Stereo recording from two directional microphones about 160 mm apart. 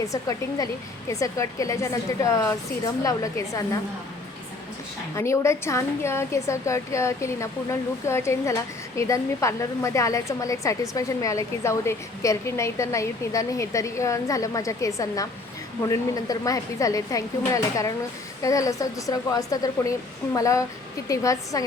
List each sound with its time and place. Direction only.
0.0 s a woman's voice: 20° left (ahead or behind)
5.1 s a woman's voice: 15° left (ahead or behind)